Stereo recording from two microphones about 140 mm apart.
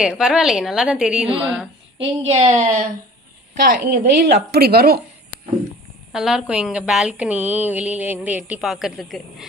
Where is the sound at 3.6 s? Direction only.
90° right.